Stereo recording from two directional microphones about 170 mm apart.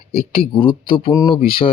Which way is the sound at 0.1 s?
35° left (ahead or behind).